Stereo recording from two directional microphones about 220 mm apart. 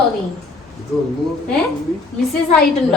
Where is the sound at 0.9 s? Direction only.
Centre (ahead or behind).